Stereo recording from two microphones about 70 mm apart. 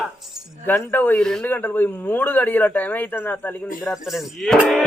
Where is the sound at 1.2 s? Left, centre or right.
Centre.